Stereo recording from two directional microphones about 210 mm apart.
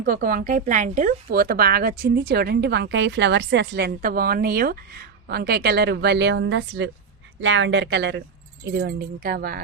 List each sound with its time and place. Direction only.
0.0 s speech: 40° right (ahead or behind)